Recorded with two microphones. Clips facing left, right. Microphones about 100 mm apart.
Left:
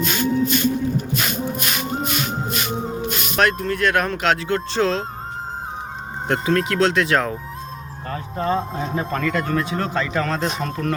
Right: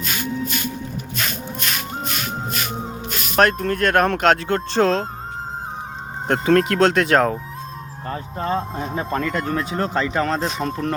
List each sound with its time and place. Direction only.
0.0 s music: centre (ahead or behind)
3.3 s speech: 45° right (ahead or behind)
6.2 s speech: 45° right (ahead or behind)
8.0 s speech: 25° right (ahead or behind)